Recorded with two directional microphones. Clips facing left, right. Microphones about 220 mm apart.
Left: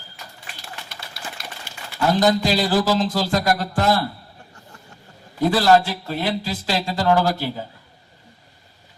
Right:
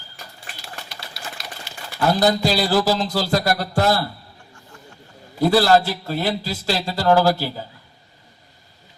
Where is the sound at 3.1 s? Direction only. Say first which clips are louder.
Even; 40° right (ahead or behind).